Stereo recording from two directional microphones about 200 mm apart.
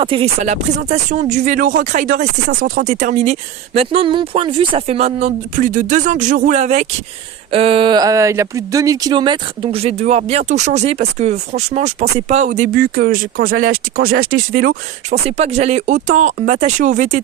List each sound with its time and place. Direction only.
0.0 s speech: 25° right (ahead or behind)
3.8 s speech: 30° right (ahead or behind); by 14.8 s 45° right (ahead or behind)
15.1 s speech: 30° right (ahead or behind)